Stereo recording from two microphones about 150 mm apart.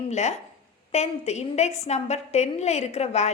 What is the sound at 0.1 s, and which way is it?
A woman's voice, 50° left (ahead or behind).